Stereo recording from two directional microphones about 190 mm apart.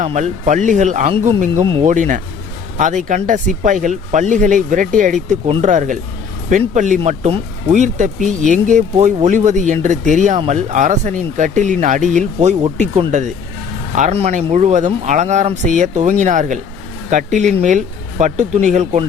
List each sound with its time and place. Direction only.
0.0 s speech: 40° right (ahead or behind)
1.9 s speech: 40° right (ahead or behind)